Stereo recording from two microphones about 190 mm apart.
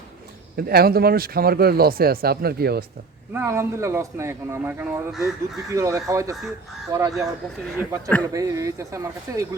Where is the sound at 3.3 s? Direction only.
15° right (ahead or behind).